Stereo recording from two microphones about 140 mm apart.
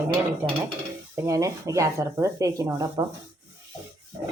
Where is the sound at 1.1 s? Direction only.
20° right (ahead or behind).